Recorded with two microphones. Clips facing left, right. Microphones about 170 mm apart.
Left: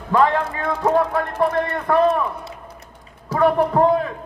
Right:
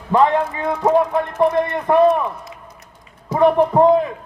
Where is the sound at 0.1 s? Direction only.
25° right (ahead or behind).